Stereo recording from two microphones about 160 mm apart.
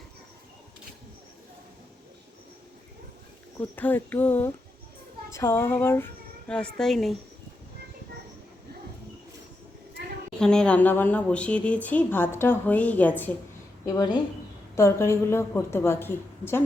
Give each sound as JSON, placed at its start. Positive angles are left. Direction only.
{"t": 3.6, "sound": "speech", "side_deg": 10}
{"t": 6.7, "sound": "speech", "side_deg": 0}
{"t": 10.3, "sound": "speech", "side_deg": 5}
{"t": 13.8, "sound": "a woman's voice", "side_deg": 25}